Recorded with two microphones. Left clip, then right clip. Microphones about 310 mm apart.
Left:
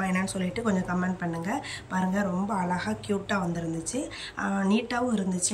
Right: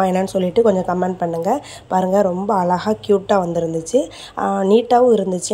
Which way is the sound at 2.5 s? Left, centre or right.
Right.